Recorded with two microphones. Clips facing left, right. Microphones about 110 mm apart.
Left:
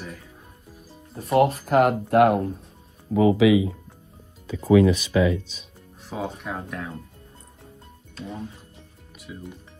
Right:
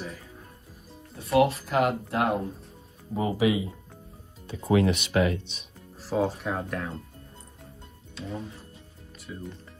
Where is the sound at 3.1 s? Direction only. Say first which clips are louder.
Left 8 dB; 90° left.